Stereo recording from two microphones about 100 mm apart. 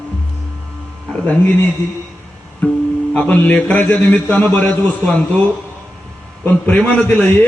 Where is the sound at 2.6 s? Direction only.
10° left (ahead or behind).